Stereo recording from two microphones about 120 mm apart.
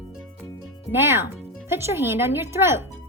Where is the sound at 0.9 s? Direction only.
20° right (ahead or behind).